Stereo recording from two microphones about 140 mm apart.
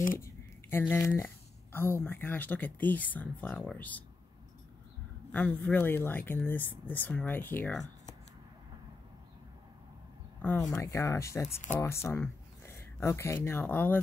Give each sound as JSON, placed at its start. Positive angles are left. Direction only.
{"t": 0.2, "sound": "speech", "side_deg": 15}
{"t": 5.3, "sound": "speech", "side_deg": 10}
{"t": 10.4, "sound": "speech", "side_deg": 20}